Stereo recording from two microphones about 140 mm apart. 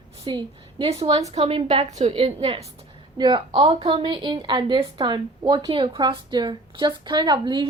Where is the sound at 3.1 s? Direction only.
30° right (ahead or behind).